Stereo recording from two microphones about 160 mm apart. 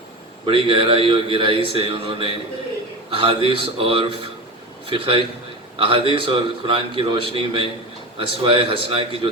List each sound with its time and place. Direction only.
0.4 s a man's voice: 35° right (ahead or behind)